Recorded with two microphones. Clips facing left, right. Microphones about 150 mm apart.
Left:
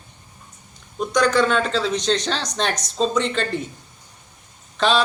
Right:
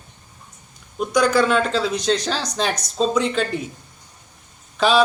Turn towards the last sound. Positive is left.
turn(degrees=-5)  # may be behind; listen again after turning